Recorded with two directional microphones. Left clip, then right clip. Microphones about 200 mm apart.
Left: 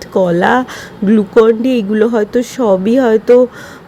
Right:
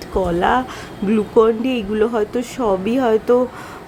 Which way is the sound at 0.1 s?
20° left (ahead or behind).